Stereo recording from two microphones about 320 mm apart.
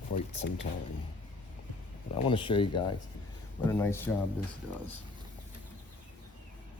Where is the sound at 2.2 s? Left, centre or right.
Centre.